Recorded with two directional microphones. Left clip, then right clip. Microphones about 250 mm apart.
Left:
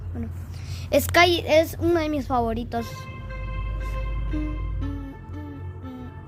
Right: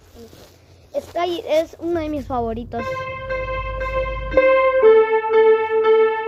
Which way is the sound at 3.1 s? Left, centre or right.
Right.